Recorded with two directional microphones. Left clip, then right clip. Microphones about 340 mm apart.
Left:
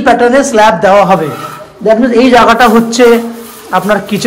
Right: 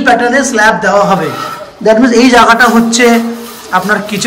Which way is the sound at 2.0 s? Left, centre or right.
Centre.